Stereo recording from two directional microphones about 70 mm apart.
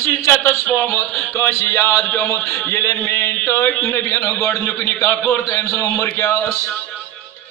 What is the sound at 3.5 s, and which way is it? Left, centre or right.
A man's voice, left.